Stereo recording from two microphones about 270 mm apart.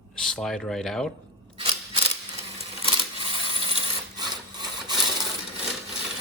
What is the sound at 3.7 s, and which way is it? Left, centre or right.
Wood, centre.